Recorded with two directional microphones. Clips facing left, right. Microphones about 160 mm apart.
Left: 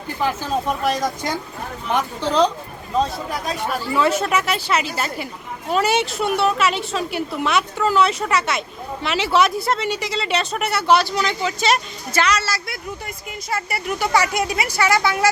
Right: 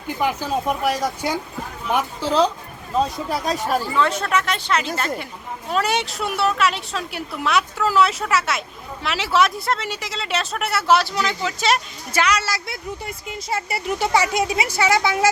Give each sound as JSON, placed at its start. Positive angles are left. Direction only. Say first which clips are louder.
{"t": 0.2, "sound": "speech", "louder": "even", "side_deg": -15}
{"t": 3.4, "sound": "speech", "louder": "right 3 dB", "side_deg": -40}
{"t": 3.9, "sound": "a woman's voice", "louder": "left 6 dB", "side_deg": 5}
{"t": 12.1, "sound": "speech", "louder": "left 1 dB", "side_deg": -10}